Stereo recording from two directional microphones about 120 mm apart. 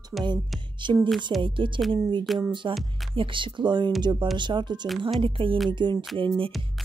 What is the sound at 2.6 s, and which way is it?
Speech, 45° right (ahead or behind).